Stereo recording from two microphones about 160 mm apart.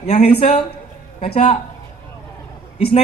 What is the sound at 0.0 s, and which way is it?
Speech, 40° left (ahead or behind).